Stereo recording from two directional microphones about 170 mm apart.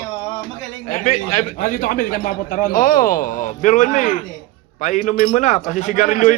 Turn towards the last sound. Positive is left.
turn(degrees=50)  # may be behind; listen again after turning